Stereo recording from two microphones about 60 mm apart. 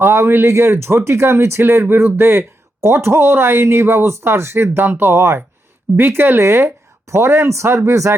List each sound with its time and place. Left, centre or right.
0.0 s speech: right
1.6 s speech: right